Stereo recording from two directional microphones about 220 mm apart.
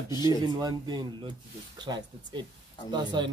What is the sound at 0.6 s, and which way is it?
Speech, 15° right (ahead or behind).